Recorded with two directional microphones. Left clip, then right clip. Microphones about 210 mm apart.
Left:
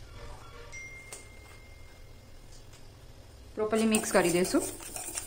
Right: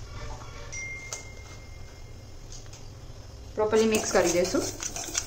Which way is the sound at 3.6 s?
45° left (ahead or behind).